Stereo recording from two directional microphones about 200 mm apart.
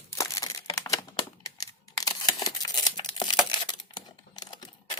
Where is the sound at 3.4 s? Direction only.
20° left (ahead or behind).